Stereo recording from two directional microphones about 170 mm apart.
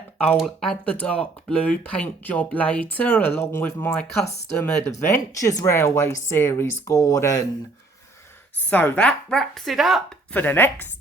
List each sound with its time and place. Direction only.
0.2 s speech: 5° left (ahead or behind)
8.5 s speech: 10° left (ahead or behind)
10.3 s speech: 10° left (ahead or behind)